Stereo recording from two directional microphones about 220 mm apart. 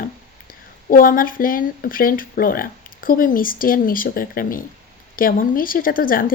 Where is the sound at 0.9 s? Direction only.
40° left (ahead or behind).